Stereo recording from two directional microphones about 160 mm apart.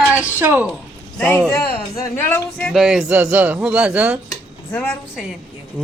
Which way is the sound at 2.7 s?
5° right (ahead or behind).